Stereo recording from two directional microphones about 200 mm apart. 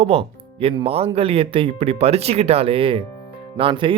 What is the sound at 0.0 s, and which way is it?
Speech, 30° right (ahead or behind).